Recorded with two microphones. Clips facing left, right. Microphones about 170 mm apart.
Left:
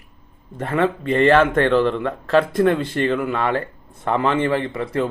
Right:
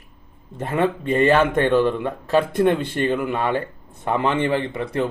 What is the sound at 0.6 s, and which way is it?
A man's voice, 15° right (ahead or behind).